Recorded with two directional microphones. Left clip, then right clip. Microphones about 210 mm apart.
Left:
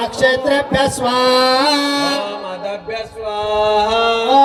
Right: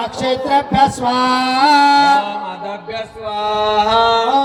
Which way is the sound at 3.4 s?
65° left (ahead or behind).